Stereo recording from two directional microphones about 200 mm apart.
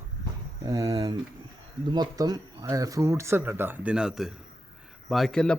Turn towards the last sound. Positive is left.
turn(degrees=5)  # may be behind; listen again after turning